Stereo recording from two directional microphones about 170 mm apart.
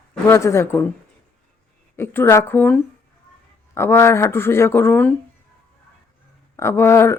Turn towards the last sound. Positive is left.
turn(degrees=15)  # may be behind; listen again after turning